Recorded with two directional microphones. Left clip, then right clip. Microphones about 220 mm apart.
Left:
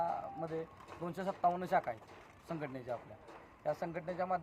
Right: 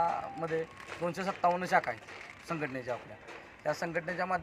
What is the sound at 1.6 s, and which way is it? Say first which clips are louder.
Speech: right 5 dB; centre (ahead or behind).